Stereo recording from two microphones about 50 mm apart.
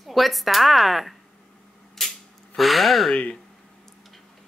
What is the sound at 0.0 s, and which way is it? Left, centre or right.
A woman's voice, centre.